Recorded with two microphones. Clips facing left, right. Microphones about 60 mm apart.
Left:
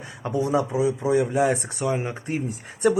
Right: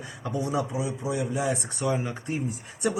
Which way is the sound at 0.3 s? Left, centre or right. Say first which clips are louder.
Left 5 dB; left.